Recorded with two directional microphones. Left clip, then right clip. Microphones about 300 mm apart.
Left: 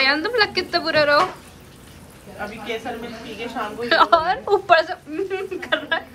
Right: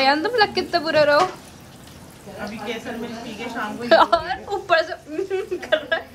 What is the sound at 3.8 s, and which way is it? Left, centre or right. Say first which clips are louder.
Speech: right 2 dB; centre.